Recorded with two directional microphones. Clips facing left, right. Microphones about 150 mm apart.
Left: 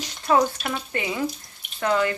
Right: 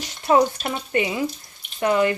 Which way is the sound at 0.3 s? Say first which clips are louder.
Right 3 dB; 20° right (ahead or behind).